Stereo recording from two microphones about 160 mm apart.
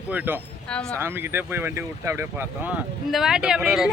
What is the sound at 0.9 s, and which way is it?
Speech, 15° right (ahead or behind).